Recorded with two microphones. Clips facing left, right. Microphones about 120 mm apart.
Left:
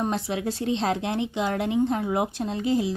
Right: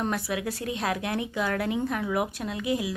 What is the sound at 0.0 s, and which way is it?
A woman's voice, 25° left (ahead or behind).